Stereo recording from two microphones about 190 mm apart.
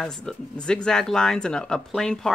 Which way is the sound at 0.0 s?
5° left (ahead or behind).